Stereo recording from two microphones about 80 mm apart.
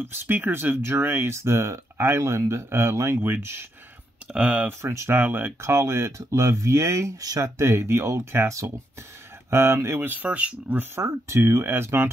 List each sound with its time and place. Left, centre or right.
0.0 s speech: right
4.3 s speech: centre
4.8 s speech: right
11.0 s speech: right